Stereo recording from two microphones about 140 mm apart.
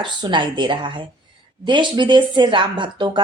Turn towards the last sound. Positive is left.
turn(degrees=-35)  # may be behind; listen again after turning